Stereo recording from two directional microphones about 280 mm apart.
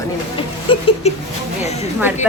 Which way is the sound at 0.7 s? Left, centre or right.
Centre.